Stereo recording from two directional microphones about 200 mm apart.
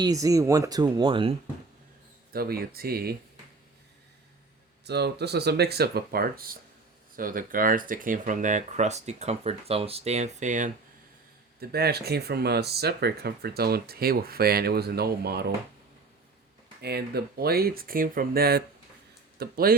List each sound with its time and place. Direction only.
0.0 s speech: 15° right (ahead or behind)
2.3 s speech: 50° right (ahead or behind)
4.9 s speech: 55° right (ahead or behind); by 10.7 s 40° right (ahead or behind)
11.7 s speech: 50° right (ahead or behind)
16.8 s speech: 50° right (ahead or behind)